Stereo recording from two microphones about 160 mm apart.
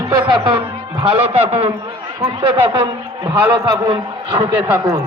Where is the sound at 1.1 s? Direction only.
40° right (ahead or behind).